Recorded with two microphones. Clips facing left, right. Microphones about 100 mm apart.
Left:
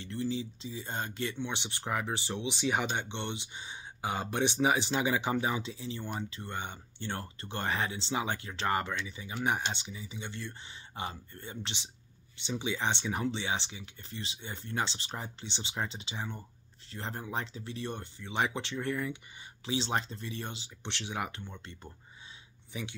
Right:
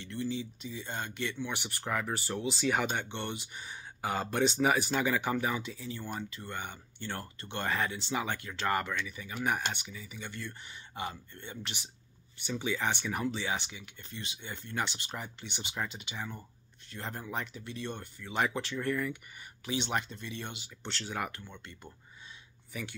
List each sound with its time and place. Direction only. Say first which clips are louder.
0.0 s speech: left 1 dB; 30° left (ahead or behind)